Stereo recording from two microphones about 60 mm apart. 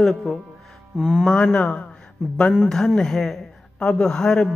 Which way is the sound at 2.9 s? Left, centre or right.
Centre.